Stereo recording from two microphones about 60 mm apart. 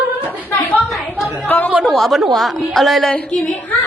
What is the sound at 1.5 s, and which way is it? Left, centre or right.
Speech, left.